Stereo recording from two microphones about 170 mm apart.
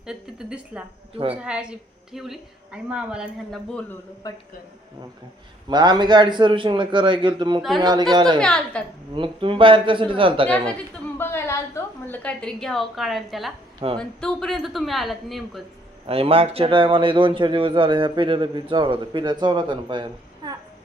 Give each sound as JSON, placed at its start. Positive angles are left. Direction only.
{"t": 0.0, "sound": "a woman's voice", "side_deg": -5}
{"t": 4.2, "sound": "a man's voice", "side_deg": 20}
{"t": 5.6, "sound": "a man's voice", "side_deg": -25}
{"t": 8.4, "sound": "a woman's voice", "side_deg": 5}
{"t": 9.1, "sound": "a man's voice", "side_deg": -30}
{"t": 11.2, "sound": "a woman's voice", "side_deg": 15}
{"t": 13.7, "sound": "speech", "side_deg": -25}
{"t": 14.0, "sound": "a woman's voice", "side_deg": 5}
{"t": 16.0, "sound": "a man's voice", "side_deg": -35}